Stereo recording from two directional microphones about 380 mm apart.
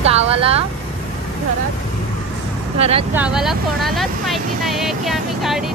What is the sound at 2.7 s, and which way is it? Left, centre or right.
Speech, centre.